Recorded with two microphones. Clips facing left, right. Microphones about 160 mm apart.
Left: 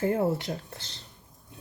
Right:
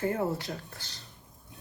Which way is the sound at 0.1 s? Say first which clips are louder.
Left 4 dB; 25° left (ahead or behind).